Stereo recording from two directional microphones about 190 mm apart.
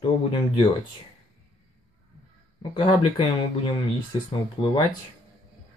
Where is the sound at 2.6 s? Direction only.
25° left (ahead or behind).